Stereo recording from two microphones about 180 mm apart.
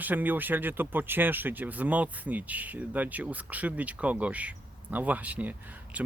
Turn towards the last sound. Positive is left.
turn(degrees=-10)  # may be behind; listen again after turning